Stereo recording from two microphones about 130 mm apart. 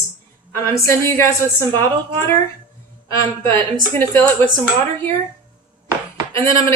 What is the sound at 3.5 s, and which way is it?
Speech, 45° right (ahead or behind).